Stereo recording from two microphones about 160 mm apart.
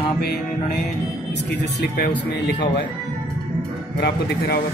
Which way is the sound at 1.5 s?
90° left.